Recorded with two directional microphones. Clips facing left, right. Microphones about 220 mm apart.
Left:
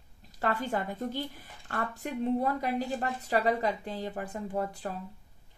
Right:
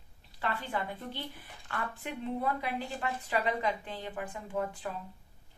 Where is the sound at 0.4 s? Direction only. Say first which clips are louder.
Left 4 dB; 45° left (ahead or behind).